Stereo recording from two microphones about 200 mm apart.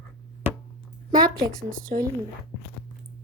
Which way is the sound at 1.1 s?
45° right (ahead or behind).